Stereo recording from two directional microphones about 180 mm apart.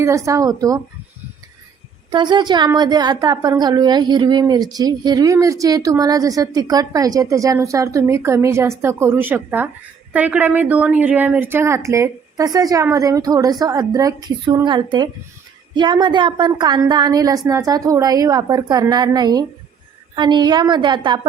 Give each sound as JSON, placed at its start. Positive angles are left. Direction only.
{"t": 0.0, "sound": "a woman's voice", "side_deg": -15}
{"t": 2.0, "sound": "a woman's voice", "side_deg": -25}